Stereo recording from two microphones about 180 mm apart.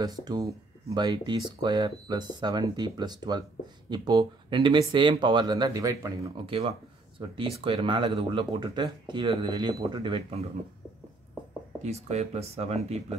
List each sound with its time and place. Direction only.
0.0 s speech: 20° right (ahead or behind)
11.8 s speech: 35° right (ahead or behind)